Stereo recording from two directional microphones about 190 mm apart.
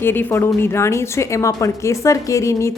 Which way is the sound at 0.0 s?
10° left (ahead or behind).